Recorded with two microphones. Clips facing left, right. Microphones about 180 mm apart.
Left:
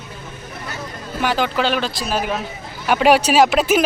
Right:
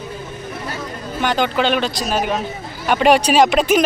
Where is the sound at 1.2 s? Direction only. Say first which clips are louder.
Right 1 dB; 5° left (ahead or behind).